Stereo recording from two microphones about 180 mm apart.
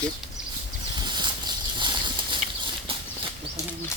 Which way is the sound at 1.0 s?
25° right (ahead or behind).